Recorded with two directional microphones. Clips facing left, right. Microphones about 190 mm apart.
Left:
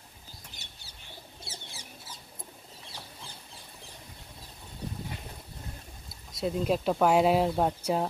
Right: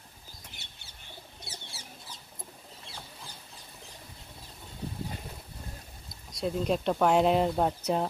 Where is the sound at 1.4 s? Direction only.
25° left (ahead or behind).